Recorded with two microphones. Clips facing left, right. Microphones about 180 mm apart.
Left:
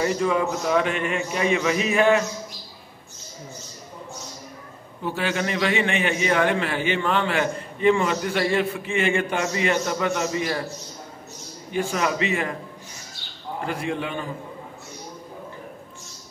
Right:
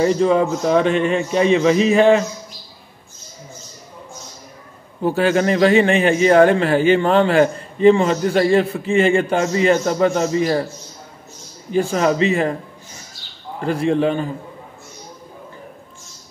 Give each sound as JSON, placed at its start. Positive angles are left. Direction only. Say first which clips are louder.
{"t": 0.0, "sound": "a man's voice", "louder": "right 7 dB", "side_deg": -30}
{"t": 5.0, "sound": "a man's voice", "louder": "right 9 dB", "side_deg": -40}
{"t": 11.7, "sound": "a man's voice", "louder": "right 7 dB", "side_deg": -35}
{"t": 13.7, "sound": "a man's voice", "louder": "right 11 dB", "side_deg": -35}